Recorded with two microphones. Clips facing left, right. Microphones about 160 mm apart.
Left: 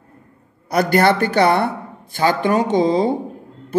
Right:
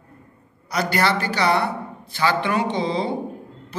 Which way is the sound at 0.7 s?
50° left (ahead or behind).